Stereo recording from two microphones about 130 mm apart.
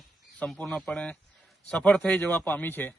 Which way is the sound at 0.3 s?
10° left (ahead or behind).